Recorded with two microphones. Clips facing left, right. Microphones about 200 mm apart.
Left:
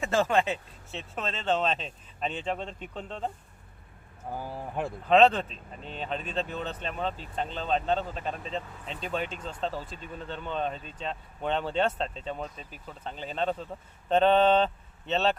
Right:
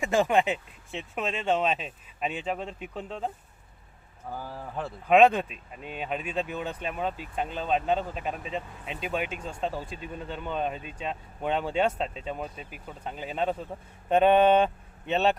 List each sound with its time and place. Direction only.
0.0 s speech: 15° right (ahead or behind)
4.3 s speech: 15° left (ahead or behind)
5.0 s speech: 10° right (ahead or behind)